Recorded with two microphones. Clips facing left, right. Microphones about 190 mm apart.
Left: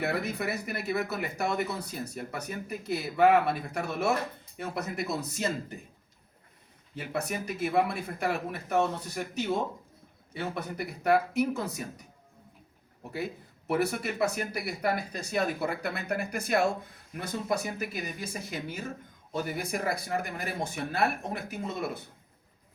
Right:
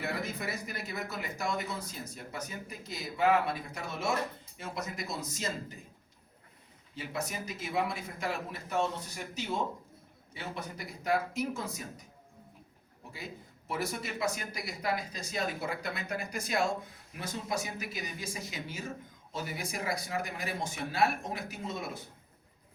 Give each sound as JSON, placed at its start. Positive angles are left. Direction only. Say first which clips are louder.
{"t": 0.0, "sound": "speech", "louder": "left 5 dB", "side_deg": 65}
{"t": 6.9, "sound": "speech", "louder": "left 4 dB", "side_deg": 60}
{"t": 13.1, "sound": "speech", "louder": "left 10 dB", "side_deg": 65}